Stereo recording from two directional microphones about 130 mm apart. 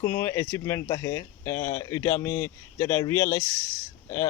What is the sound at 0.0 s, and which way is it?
Speech, 20° left (ahead or behind).